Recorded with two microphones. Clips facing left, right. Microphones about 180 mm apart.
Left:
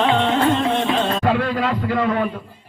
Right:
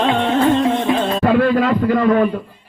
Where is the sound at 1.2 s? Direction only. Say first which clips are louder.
Right 6 dB; 50° right (ahead or behind).